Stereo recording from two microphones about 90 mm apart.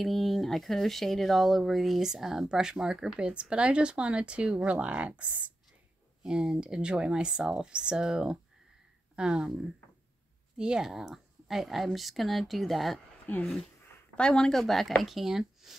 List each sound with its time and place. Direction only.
0.0 s speech: centre (ahead or behind)
10.6 s speech: 5° right (ahead or behind)
13.3 s speech: 15° left (ahead or behind); by 15.7 s 5° right (ahead or behind)